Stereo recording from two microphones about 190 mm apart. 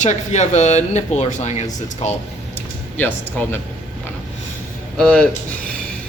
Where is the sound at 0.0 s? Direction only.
40° left (ahead or behind).